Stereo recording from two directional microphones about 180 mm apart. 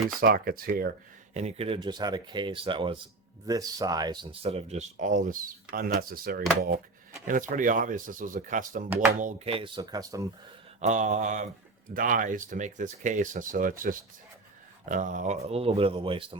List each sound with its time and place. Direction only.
0.2 s speech: 55° right (ahead or behind)
1.3 s speech: 35° right (ahead or behind)
9.5 s speech: 30° right (ahead or behind)
10.8 s speech: 40° right (ahead or behind)